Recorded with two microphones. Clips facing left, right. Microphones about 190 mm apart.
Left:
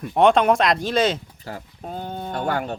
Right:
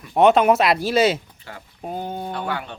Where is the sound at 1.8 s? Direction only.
10° right (ahead or behind).